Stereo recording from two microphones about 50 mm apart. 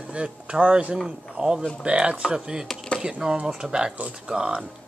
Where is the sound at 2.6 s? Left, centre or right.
Centre.